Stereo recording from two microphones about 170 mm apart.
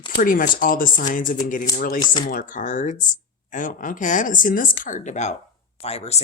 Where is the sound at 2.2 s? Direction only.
50° left (ahead or behind).